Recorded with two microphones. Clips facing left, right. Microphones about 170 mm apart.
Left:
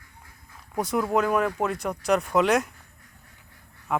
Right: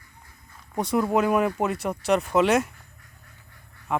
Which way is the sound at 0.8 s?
Centre (ahead or behind).